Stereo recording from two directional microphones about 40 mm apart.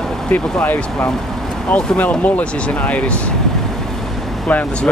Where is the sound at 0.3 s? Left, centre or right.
Left.